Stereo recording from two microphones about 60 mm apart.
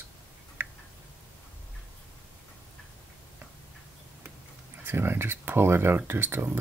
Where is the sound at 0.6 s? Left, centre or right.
Right.